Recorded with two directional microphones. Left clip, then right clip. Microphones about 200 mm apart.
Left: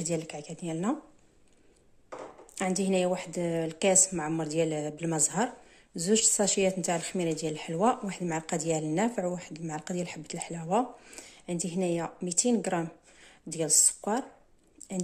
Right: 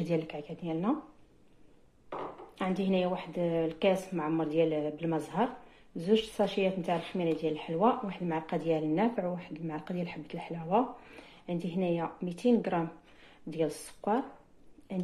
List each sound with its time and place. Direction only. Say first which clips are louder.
0.0 s speech: right 1 dB; 35° left (ahead or behind)
2.5 s a woman's voice: left 3 dB; 50° left (ahead or behind)